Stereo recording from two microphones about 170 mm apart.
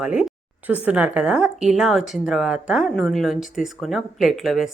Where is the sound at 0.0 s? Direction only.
5° right (ahead or behind).